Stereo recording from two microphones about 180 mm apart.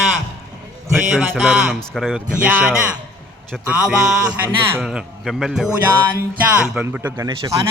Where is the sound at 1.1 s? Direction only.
5° right (ahead or behind).